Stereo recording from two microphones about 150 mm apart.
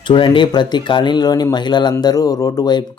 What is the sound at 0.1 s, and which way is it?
Speech, 35° left (ahead or behind).